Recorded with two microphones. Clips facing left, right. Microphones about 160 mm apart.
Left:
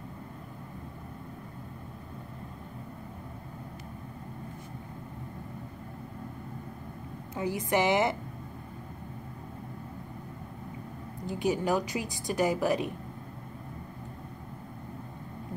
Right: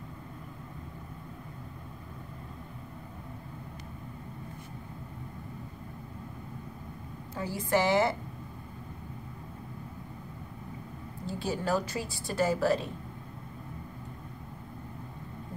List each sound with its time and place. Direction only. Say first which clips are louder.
7.3 s a woman's voice: left 1 dB; 20° left (ahead or behind)
11.2 s a woman's voice: left 3 dB; 15° left (ahead or behind)